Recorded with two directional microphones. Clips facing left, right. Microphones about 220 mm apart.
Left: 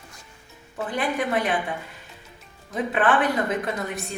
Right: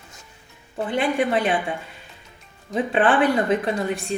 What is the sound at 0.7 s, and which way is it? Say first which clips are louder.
Speech: right 4 dB; 25° right (ahead or behind).